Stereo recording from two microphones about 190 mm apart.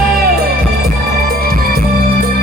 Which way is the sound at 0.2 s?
55° right (ahead or behind).